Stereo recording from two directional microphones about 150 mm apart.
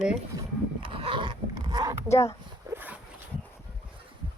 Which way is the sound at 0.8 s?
35° right (ahead or behind).